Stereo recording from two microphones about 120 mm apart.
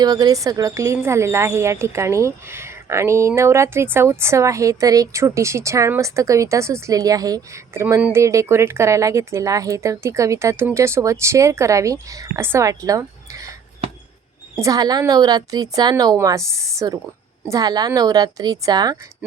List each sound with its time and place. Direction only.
0.0 s speech: 35° right (ahead or behind)
14.5 s a woman's voice: 30° right (ahead or behind)